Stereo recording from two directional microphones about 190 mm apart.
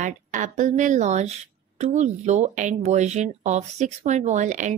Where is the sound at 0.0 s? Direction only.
40° right (ahead or behind).